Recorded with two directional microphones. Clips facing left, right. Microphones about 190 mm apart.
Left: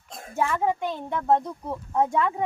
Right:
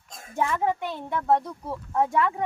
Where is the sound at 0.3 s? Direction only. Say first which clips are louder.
Left 1 dB; 10° left (ahead or behind).